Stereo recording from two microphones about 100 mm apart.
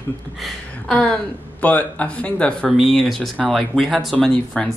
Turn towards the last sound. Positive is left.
turn(degrees=5)  # may be behind; listen again after turning